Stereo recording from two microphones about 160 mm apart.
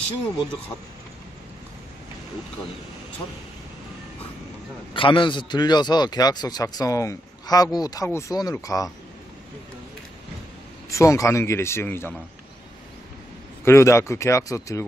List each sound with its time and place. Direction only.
4.9 s a man's voice: 30° left (ahead or behind)
10.9 s speech: 20° left (ahead or behind)
13.7 s speech: 15° left (ahead or behind)